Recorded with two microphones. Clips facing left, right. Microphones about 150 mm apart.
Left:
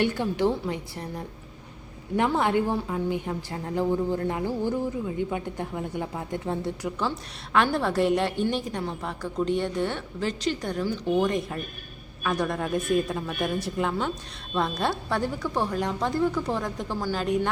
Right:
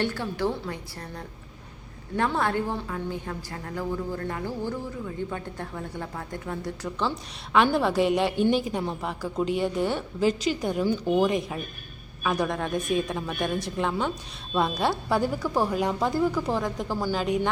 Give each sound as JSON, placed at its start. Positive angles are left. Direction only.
{"t": 0.0, "sound": "a woman's voice", "side_deg": 15}
{"t": 7.5, "sound": "a woman's voice", "side_deg": 0}